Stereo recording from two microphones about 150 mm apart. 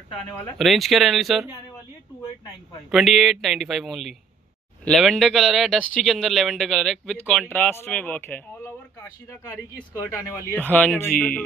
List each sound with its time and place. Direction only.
0.1 s speech: centre (ahead or behind)
2.9 s speech: centre (ahead or behind)